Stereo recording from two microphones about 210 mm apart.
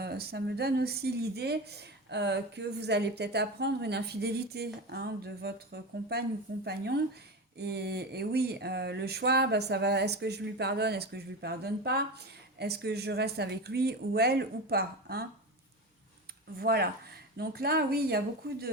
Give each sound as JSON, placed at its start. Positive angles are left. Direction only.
{"t": 0.0, "sound": "speech", "side_deg": -50}
{"t": 16.6, "sound": "speech", "side_deg": -45}